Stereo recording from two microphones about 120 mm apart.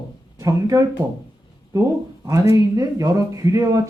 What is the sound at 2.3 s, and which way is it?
Speech, 30° right (ahead or behind).